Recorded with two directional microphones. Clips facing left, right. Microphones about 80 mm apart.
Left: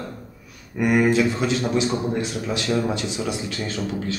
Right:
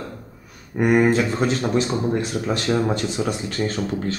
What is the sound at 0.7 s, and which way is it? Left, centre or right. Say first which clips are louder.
Speech: right 1 dB; right.